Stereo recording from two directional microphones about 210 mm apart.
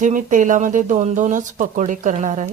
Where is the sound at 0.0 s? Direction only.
40° right (ahead or behind).